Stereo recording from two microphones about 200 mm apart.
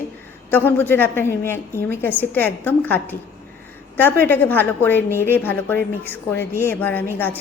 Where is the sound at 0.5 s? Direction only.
10° left (ahead or behind).